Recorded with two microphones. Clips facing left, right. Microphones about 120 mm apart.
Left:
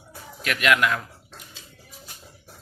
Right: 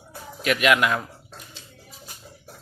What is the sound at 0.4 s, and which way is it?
Speech, 15° right (ahead or behind).